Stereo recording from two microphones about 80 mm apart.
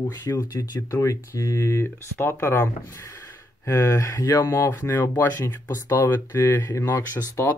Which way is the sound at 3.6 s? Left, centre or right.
Left.